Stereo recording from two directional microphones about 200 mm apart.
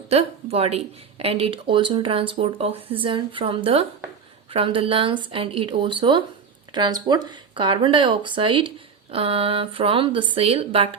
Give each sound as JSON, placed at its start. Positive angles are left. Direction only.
{"t": 0.1, "sound": "speech", "side_deg": -30}